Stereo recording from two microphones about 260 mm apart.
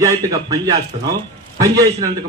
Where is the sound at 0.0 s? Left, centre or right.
Centre.